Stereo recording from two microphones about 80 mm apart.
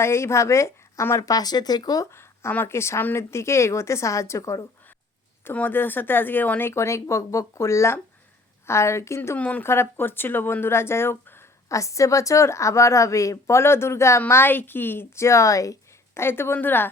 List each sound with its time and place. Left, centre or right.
0.0 s a woman's voice: left
2.0 s a sound: left
2.5 s a woman's voice: left
5.5 s a woman's voice: left
9.4 s speech: centre
9.6 s speech: left
11.8 s a woman's voice: left
16.2 s speech: left